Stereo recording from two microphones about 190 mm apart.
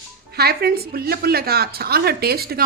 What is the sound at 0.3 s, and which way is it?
A woman's voice, 55° right (ahead or behind).